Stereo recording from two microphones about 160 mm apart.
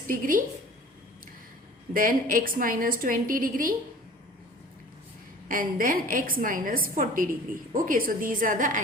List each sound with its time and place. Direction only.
0.1 s a woman's voice: 55° right (ahead or behind)
1.9 s a woman's voice: 60° right (ahead or behind)
5.5 s a woman's voice: 60° right (ahead or behind)